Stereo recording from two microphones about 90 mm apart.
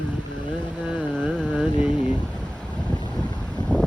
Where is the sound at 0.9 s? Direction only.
10° right (ahead or behind).